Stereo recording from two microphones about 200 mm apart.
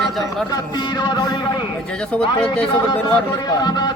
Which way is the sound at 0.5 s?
20° left (ahead or behind).